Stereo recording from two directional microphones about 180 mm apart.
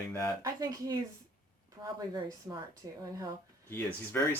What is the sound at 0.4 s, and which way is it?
A woman's voice, 20° right (ahead or behind).